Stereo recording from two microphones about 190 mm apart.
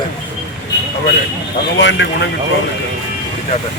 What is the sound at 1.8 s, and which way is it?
Speech, 70° left (ahead or behind).